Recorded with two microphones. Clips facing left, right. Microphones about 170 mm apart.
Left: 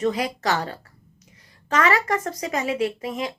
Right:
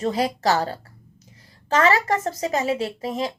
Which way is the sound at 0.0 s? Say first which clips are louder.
Right 1 dB; 30° right (ahead or behind).